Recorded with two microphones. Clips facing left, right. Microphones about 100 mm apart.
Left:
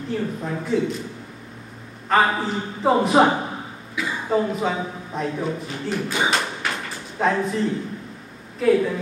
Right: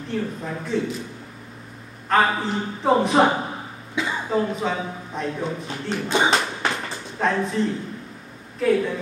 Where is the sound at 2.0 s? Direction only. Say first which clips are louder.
Left 1 dB; centre (ahead or behind).